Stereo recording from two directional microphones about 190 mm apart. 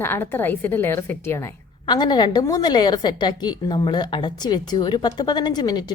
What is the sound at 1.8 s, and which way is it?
A woman's voice, 25° left (ahead or behind).